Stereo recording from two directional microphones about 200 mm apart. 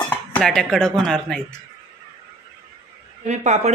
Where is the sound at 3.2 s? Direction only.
35° right (ahead or behind).